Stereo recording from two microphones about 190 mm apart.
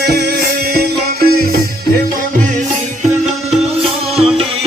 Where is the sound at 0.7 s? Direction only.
55° right (ahead or behind).